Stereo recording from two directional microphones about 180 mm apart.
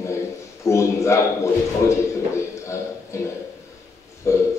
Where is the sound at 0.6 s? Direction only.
15° left (ahead or behind).